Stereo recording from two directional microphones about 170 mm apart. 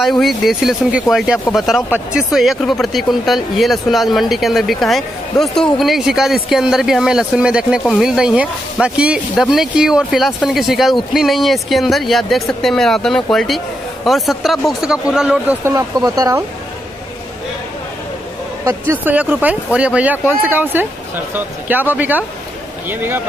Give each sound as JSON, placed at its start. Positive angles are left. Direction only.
{"t": 0.0, "sound": "speech", "side_deg": 0}
{"t": 15.6, "sound": "speech", "side_deg": -20}
{"t": 18.6, "sound": "speech", "side_deg": -15}